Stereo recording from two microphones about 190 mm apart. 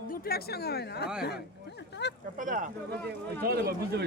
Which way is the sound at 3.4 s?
55° right (ahead or behind).